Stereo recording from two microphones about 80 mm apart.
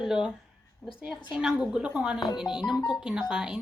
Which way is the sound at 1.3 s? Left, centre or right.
Centre.